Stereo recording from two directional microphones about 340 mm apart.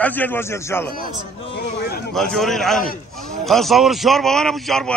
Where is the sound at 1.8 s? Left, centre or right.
Left.